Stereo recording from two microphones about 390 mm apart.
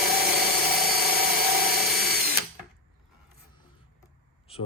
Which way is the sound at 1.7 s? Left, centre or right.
Right.